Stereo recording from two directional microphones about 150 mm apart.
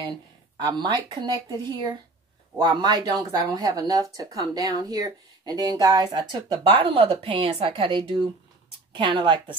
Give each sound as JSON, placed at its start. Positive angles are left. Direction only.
{"t": 0.6, "sound": "a woman's voice", "side_deg": -30}